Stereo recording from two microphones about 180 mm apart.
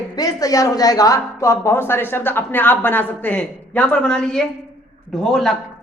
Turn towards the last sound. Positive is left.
turn(degrees=0)  # may be behind; listen again after turning